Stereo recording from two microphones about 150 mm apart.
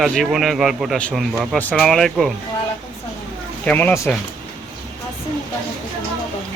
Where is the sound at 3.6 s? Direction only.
10° left (ahead or behind).